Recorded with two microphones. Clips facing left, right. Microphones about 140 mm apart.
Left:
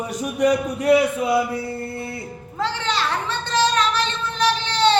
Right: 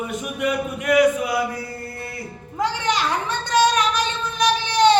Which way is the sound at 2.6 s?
15° right (ahead or behind).